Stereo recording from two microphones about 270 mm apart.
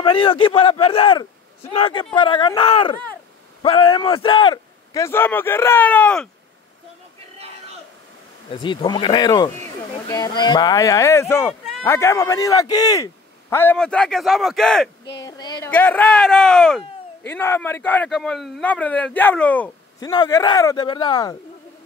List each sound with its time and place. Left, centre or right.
0.0 s a man's voice: centre
8.5 s a man's voice: centre
15.2 s a man's voice: centre